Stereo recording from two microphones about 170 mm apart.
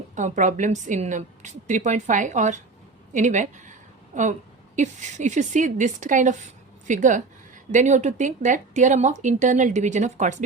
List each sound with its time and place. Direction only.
0.2 s a woman's voice: 45° right (ahead or behind)